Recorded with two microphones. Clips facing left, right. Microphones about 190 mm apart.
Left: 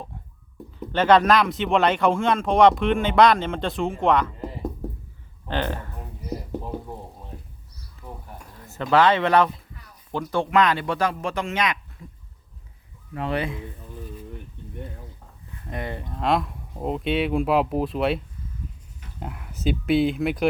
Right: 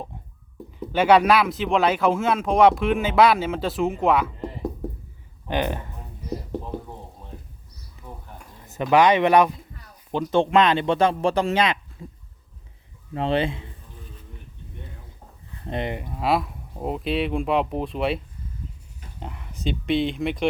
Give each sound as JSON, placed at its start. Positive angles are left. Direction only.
{"t": 0.9, "sound": "speech", "side_deg": -10}
{"t": 5.5, "sound": "speech", "side_deg": -15}
{"t": 8.0, "sound": "a sound", "side_deg": 10}
{"t": 8.6, "sound": "speech", "side_deg": -15}
{"t": 12.0, "sound": "a sound", "side_deg": -30}
{"t": 13.1, "sound": "speech", "side_deg": -25}
{"t": 15.6, "sound": "speech", "side_deg": -25}
{"t": 19.2, "sound": "speech", "side_deg": 5}